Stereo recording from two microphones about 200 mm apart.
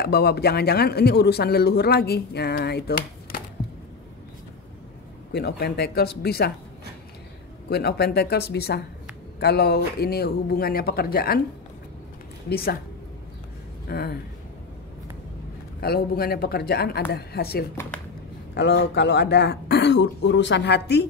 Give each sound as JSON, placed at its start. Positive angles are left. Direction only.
{"t": 0.0, "sound": "speech", "side_deg": 55}
{"t": 5.3, "sound": "speech", "side_deg": 50}
{"t": 7.7, "sound": "speech", "side_deg": 55}
{"t": 12.4, "sound": "speech", "side_deg": 50}
{"t": 13.8, "sound": "speech", "side_deg": 50}
{"t": 15.8, "sound": "speech", "side_deg": 50}